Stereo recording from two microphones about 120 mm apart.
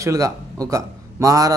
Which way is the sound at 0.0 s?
25° right (ahead or behind).